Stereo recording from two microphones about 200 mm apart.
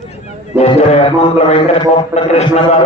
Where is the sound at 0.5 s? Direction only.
30° left (ahead or behind).